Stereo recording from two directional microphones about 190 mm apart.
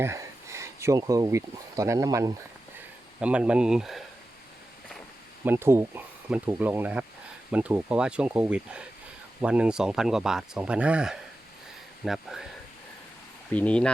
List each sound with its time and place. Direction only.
0.0 s speech: 15° right (ahead or behind)
3.2 s speech: 5° right (ahead or behind)
5.5 s speech: 10° right (ahead or behind)
13.5 s speech: 5° left (ahead or behind)